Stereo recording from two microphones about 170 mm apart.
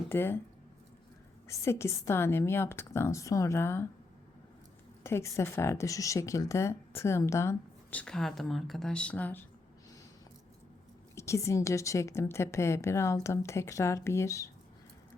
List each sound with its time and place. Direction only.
0.1 s speech: 15° left (ahead or behind)
1.5 s speech: 15° left (ahead or behind)
5.0 s speech: 15° left (ahead or behind)
11.1 s speech: 15° left (ahead or behind)